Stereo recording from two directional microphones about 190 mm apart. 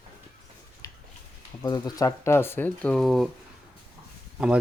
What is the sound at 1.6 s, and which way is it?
Speech, 20° left (ahead or behind).